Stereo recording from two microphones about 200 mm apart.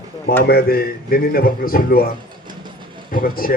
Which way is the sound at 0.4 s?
50° left (ahead or behind).